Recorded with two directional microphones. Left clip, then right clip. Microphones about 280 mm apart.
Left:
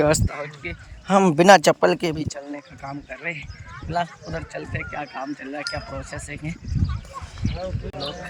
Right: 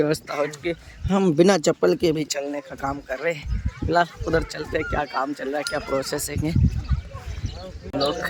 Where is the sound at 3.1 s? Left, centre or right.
Centre.